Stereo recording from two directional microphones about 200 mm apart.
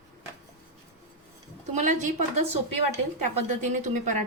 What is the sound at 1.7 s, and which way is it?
Speech, 35° right (ahead or behind).